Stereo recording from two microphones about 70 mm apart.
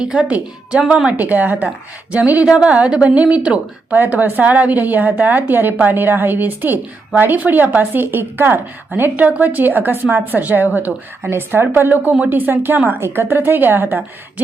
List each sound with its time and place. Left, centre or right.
0.0 s a woman's voice: centre
11.3 s a woman's voice: right